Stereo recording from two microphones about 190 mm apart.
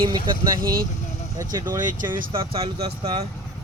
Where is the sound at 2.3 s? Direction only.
30° right (ahead or behind).